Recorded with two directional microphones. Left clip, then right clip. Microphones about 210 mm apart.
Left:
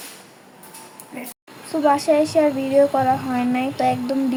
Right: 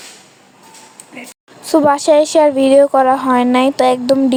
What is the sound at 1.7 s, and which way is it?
Speech, 40° right (ahead or behind).